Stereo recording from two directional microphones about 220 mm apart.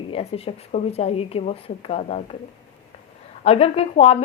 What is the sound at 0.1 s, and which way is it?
A woman's voice, 25° left (ahead or behind).